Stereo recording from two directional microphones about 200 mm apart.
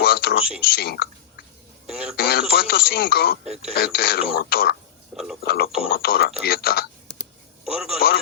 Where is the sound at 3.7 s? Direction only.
55° left (ahead or behind).